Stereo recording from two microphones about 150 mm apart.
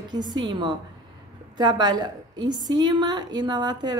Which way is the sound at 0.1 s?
30° right (ahead or behind).